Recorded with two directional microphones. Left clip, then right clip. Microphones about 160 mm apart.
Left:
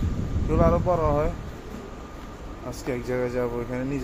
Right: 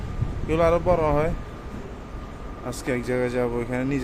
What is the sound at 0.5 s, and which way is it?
Speech, 20° right (ahead or behind).